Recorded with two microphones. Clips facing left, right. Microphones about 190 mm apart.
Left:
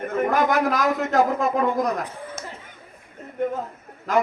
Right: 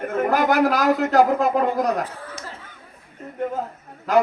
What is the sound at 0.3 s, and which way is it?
A man's voice, 35° right (ahead or behind).